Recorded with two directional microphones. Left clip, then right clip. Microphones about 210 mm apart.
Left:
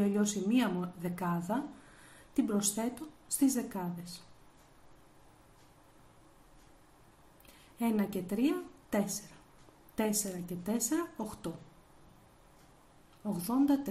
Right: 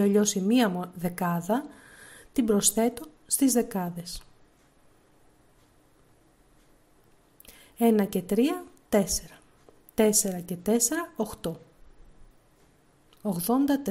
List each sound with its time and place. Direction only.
0.0 s a woman's voice: 40° right (ahead or behind)
7.4 s a woman's voice: 45° right (ahead or behind)
13.2 s a woman's voice: 40° right (ahead or behind)